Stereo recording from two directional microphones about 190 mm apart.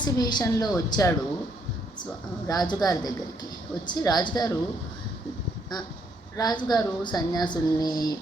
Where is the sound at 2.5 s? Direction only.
20° left (ahead or behind).